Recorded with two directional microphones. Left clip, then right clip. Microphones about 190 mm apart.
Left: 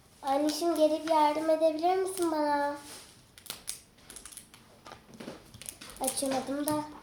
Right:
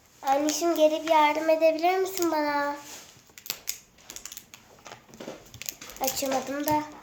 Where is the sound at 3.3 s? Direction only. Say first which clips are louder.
Right 7 dB; 20° right (ahead or behind).